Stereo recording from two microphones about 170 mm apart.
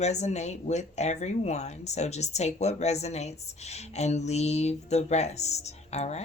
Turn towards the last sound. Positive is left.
turn(degrees=40)  # may be behind; listen again after turning